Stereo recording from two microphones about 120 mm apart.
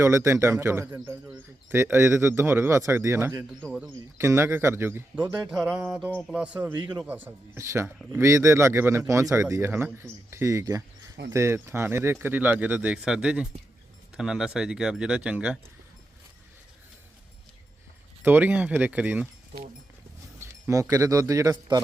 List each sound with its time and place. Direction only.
0.0 s speech: 25° right (ahead or behind)
3.7 s speech: 10° right (ahead or behind)
4.2 s speech: 20° right (ahead or behind)
5.4 s speech: 5° right (ahead or behind)
18.2 s speech: 15° right (ahead or behind)
20.4 s speech: 25° right (ahead or behind)